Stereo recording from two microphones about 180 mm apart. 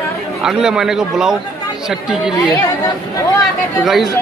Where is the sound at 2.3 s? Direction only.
20° left (ahead or behind).